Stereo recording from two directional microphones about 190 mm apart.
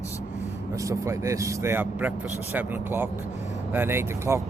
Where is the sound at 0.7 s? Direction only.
15° right (ahead or behind).